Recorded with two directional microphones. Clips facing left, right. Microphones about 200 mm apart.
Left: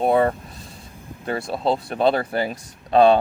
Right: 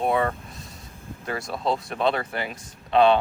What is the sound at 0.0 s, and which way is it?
Speech, 35° left (ahead or behind).